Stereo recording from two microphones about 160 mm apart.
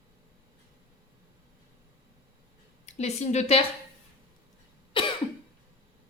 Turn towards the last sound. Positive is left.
turn(degrees=35)  # may be behind; listen again after turning